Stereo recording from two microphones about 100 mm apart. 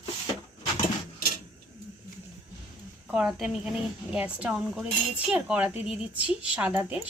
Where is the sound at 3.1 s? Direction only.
5° right (ahead or behind).